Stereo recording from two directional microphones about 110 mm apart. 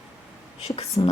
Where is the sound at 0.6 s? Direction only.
65° left (ahead or behind).